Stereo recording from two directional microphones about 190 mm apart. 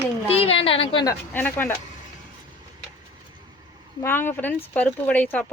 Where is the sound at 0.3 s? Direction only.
30° left (ahead or behind).